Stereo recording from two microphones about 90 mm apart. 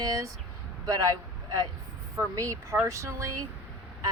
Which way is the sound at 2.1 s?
35° right (ahead or behind).